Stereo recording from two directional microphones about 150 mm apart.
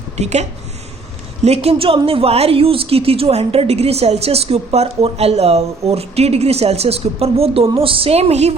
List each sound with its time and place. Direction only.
0.2 s speech: 50° right (ahead or behind)
1.5 s speech: 45° right (ahead or behind)